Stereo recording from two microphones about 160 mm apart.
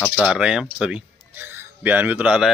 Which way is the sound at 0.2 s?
5° right (ahead or behind).